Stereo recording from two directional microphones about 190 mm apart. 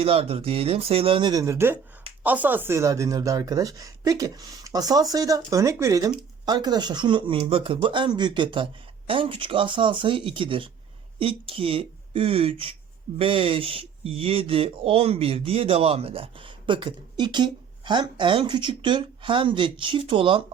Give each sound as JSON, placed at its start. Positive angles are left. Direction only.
{"t": 0.0, "sound": "speech", "side_deg": -30}